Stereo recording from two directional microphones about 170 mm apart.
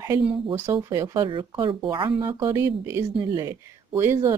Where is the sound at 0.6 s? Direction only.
20° right (ahead or behind).